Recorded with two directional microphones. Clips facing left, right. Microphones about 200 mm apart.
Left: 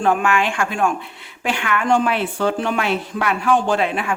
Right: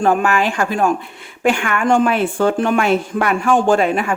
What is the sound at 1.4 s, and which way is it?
Speech, 50° right (ahead or behind).